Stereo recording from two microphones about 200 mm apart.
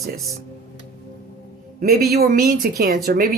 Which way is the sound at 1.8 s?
45° right (ahead or behind).